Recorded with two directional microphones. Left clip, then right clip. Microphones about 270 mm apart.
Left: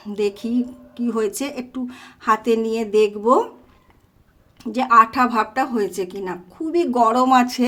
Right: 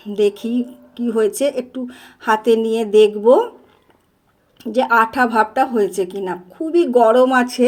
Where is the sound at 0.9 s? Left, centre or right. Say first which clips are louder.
Right 5 dB; centre.